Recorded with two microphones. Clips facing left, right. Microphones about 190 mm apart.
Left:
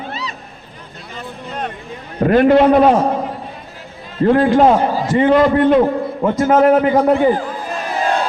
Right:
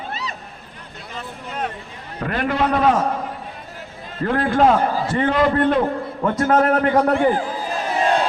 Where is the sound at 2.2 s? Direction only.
40° left (ahead or behind).